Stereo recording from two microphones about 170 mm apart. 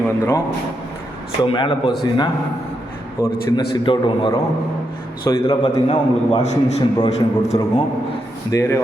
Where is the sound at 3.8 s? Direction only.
25° left (ahead or behind).